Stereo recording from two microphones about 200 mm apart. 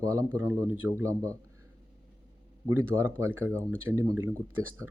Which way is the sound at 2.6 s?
10° right (ahead or behind).